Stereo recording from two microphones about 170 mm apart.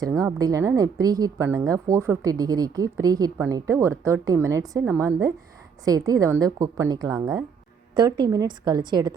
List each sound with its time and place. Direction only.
0.0 s a woman's voice: 20° right (ahead or behind)